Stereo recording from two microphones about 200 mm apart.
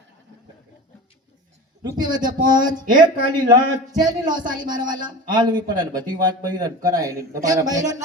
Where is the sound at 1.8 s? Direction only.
20° right (ahead or behind).